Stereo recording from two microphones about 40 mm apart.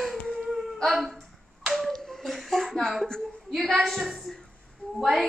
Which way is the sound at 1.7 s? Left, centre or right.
Centre.